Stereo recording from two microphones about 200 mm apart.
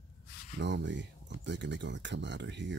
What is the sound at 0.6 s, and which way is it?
Speech, 60° right (ahead or behind).